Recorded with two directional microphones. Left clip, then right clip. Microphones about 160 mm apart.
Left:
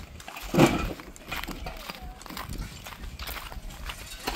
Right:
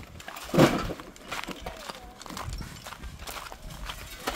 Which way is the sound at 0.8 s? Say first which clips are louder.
Even; 10° right (ahead or behind).